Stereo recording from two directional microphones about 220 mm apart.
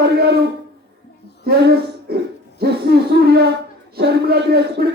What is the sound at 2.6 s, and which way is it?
Hoot, 45° right (ahead or behind).